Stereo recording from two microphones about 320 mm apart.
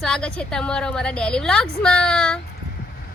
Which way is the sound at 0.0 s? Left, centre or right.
Centre.